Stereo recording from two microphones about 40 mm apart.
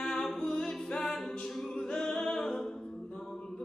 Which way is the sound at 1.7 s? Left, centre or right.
Centre.